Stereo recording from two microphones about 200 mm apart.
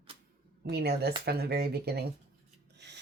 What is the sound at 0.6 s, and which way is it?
Speech, 55° right (ahead or behind).